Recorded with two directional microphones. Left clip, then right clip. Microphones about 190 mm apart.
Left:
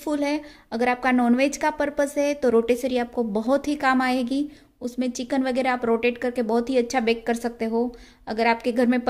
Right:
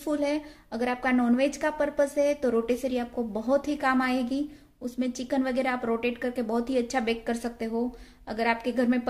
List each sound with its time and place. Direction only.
0.0 s a woman's voice: 35° left (ahead or behind)